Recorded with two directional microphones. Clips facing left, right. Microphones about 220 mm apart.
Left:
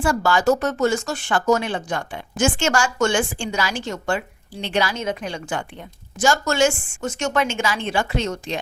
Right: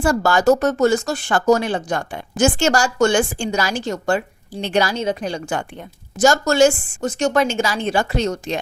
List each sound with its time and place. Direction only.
0.0 s speech: 40° right (ahead or behind)